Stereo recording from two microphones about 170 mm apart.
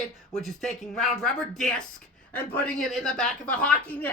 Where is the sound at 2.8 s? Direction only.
Centre (ahead or behind).